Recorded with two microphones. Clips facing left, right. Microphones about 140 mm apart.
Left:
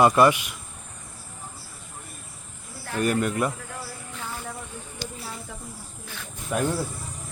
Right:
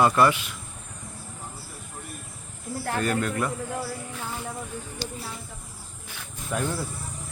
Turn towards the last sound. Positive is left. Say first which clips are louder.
# left 3 dB
turn(degrees=10)  # may be behind; listen again after turning